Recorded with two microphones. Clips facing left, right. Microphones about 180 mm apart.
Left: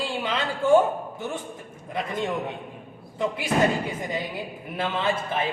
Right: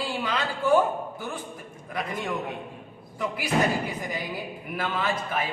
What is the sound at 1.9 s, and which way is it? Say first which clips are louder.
A man's voice: left 3 dB; 25° left (ahead or behind).